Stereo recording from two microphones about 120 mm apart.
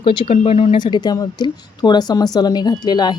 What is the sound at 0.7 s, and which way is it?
Speech, 40° left (ahead or behind).